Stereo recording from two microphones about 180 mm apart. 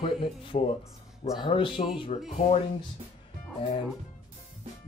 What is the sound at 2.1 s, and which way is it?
Music, 35° left (ahead or behind).